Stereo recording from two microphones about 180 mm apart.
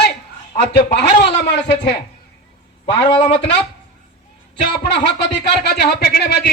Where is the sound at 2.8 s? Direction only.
25° left (ahead or behind).